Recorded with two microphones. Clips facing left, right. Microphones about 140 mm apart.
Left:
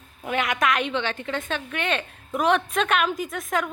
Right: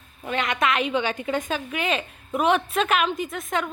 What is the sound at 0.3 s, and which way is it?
A woman's voice, 5° left (ahead or behind).